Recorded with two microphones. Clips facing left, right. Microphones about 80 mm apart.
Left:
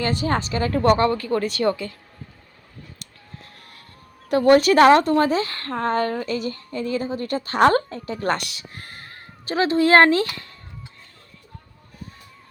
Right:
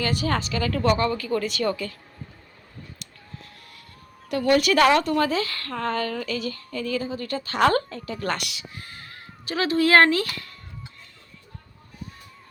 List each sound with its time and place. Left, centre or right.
0.0 s a woman's voice: left
0.9 s a woman's voice: left
4.3 s a woman's voice: left